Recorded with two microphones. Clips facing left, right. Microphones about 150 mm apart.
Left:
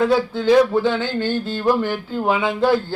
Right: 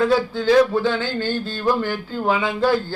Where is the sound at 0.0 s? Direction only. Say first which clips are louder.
Left 1 dB; 20° left (ahead or behind).